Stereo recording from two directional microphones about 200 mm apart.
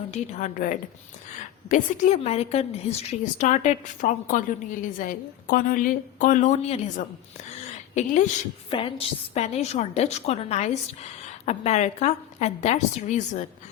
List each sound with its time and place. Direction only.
0.1 s a woman's voice: 35° left (ahead or behind)
7.6 s a sound: 35° left (ahead or behind)
8.7 s a woman's voice: 25° left (ahead or behind)